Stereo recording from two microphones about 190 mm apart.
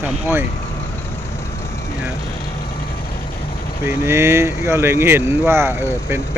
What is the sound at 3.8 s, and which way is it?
Speech, 15° right (ahead or behind).